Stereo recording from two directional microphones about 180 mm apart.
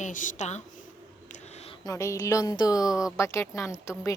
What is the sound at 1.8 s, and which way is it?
Speech, 15° left (ahead or behind).